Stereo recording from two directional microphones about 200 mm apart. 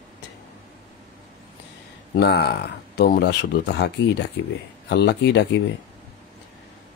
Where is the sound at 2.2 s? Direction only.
55° left (ahead or behind).